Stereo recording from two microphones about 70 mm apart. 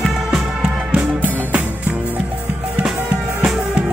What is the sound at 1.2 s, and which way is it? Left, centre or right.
Music, right.